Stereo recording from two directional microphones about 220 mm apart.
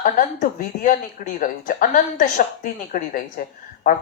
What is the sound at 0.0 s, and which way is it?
A woman's voice, 35° left (ahead or behind).